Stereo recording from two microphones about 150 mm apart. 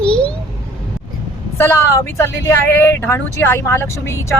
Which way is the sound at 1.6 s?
15° left (ahead or behind).